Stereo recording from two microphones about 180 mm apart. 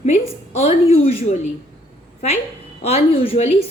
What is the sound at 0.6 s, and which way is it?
Speech, 35° left (ahead or behind).